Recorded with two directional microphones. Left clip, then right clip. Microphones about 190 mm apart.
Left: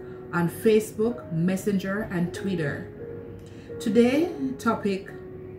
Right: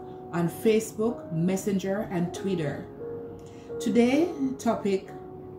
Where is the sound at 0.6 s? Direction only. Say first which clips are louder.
Left 3 dB; 5° left (ahead or behind).